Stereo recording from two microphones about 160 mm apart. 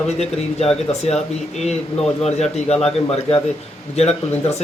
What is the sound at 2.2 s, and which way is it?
Speech, 45° left (ahead or behind).